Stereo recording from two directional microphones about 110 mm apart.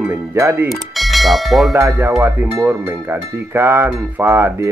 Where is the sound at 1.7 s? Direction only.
25° right (ahead or behind).